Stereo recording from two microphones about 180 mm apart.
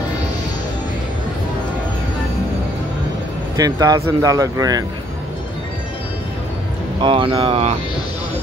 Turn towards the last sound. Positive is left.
turn(degrees=-35)  # may be behind; listen again after turning